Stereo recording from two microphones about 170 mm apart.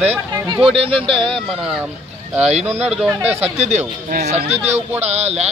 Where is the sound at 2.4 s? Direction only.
40° right (ahead or behind).